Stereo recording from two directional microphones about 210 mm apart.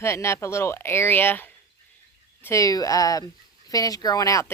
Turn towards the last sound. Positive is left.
turn(degrees=15)  # may be behind; listen again after turning